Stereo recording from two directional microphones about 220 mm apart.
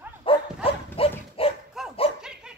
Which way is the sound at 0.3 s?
25° left (ahead or behind).